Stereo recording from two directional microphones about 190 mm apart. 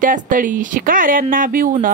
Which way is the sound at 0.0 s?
45° right (ahead or behind).